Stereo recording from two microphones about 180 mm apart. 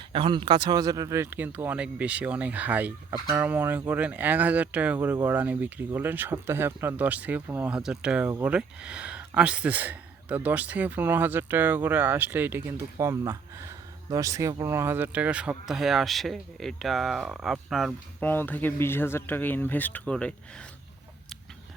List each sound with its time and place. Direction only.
0.1 s speech: 30° right (ahead or behind); by 20.7 s 5° left (ahead or behind)